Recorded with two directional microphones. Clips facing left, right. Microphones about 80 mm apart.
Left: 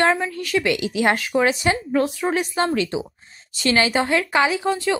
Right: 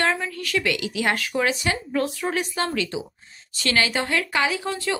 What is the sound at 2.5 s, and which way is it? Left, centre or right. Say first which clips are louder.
Speech: left 5 dB; left.